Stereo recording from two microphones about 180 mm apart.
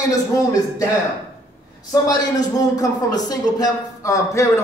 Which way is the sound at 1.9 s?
20° left (ahead or behind).